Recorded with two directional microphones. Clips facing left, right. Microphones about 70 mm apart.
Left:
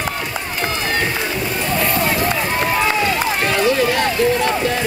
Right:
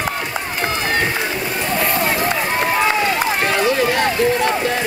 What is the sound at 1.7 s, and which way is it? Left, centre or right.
Run, centre.